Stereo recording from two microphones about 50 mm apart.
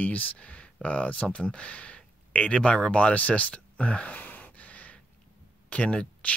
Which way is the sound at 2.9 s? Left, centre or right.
Left.